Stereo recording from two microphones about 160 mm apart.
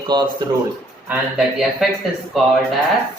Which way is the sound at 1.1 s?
5° right (ahead or behind).